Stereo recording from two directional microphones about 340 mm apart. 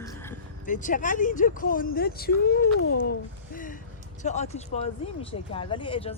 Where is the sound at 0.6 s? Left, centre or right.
Left.